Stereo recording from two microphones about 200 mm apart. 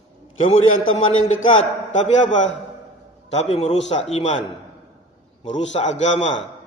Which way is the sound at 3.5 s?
30° left (ahead or behind).